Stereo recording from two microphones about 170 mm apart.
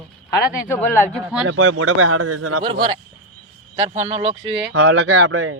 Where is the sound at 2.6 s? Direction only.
25° right (ahead or behind).